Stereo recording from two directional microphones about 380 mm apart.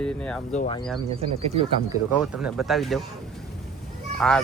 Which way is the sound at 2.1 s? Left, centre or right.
Centre.